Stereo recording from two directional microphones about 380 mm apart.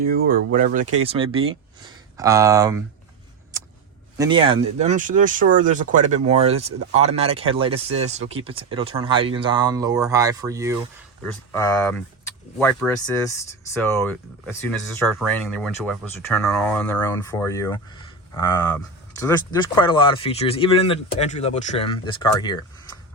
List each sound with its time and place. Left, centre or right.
0.0 s speech: right
3.5 s a sound: centre
4.2 s speech: centre
11.3 s speech: centre